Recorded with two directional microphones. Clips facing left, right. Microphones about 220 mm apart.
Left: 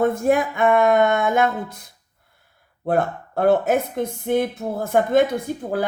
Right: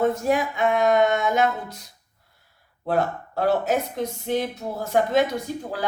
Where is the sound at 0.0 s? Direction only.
55° left (ahead or behind).